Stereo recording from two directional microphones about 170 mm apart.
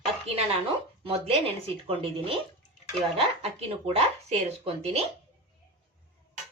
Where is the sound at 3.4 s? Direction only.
35° right (ahead or behind).